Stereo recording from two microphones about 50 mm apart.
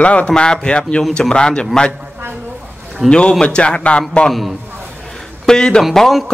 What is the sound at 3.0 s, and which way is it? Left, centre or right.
A man's voice, centre.